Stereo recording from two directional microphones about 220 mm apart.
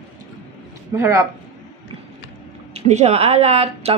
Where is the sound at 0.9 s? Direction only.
10° right (ahead or behind).